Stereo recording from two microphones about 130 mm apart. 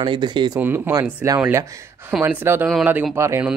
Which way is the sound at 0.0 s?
35° right (ahead or behind).